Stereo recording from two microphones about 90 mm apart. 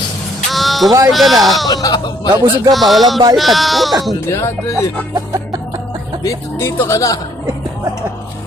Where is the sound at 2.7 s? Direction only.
Centre (ahead or behind).